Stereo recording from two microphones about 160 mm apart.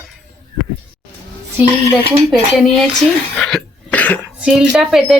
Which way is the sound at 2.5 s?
Centre (ahead or behind).